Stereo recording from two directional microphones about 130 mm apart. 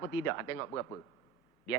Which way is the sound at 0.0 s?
25° left (ahead or behind).